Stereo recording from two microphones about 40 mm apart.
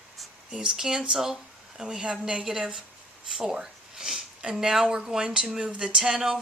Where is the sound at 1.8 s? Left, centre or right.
Right.